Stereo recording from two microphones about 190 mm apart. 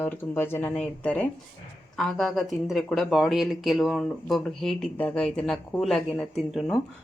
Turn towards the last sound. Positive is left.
turn(degrees=0)  # may be behind; listen again after turning